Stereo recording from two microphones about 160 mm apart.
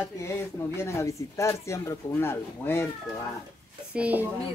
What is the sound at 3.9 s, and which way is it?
Speech, 10° right (ahead or behind).